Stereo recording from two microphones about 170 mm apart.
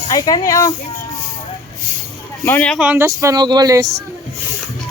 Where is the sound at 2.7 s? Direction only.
10° right (ahead or behind).